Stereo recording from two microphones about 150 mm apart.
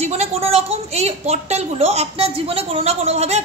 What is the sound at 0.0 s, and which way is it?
A woman's voice, 45° right (ahead or behind).